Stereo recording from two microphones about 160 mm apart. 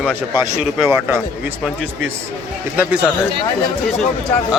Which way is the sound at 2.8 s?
10° right (ahead or behind).